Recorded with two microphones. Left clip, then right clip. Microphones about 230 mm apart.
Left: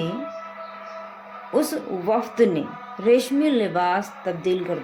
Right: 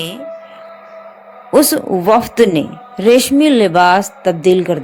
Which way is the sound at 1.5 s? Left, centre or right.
Right.